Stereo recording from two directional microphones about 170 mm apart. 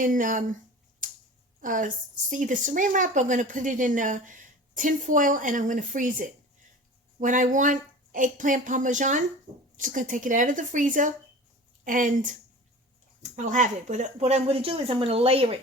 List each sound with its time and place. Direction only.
0.0 s speech: 50° right (ahead or behind)
1.6 s speech: 50° right (ahead or behind); by 15.5 s 35° right (ahead or behind)